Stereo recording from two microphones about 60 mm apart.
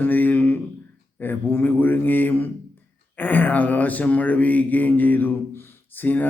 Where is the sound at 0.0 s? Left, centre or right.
Left.